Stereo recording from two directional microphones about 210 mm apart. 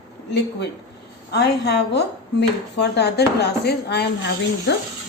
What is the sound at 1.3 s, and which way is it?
A woman's voice, 50° left (ahead or behind).